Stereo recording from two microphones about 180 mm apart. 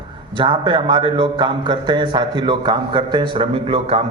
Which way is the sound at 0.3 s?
25° right (ahead or behind).